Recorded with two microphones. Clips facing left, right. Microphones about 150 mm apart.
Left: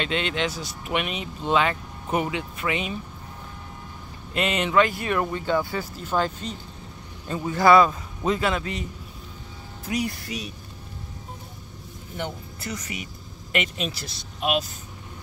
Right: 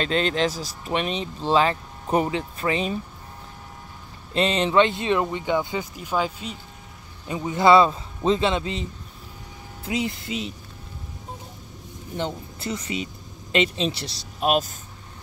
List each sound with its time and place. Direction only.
0.0 s speech: 35° right (ahead or behind)
4.3 s speech: 30° right (ahead or behind)
9.8 s speech: 25° right (ahead or behind)
12.2 s speech: 25° right (ahead or behind); by 14.7 s 40° right (ahead or behind)